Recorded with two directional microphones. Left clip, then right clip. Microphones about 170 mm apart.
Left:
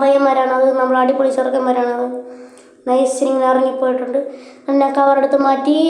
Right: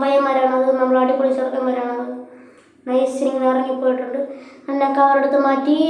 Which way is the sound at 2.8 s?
40° left (ahead or behind).